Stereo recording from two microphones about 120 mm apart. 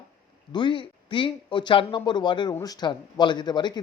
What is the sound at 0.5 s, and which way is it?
A man's voice, 40° left (ahead or behind).